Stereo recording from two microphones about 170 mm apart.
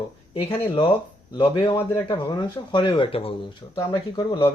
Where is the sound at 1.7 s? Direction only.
15° left (ahead or behind).